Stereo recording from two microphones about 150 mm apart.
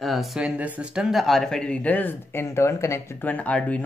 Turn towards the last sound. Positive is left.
turn(degrees=10)  # may be behind; listen again after turning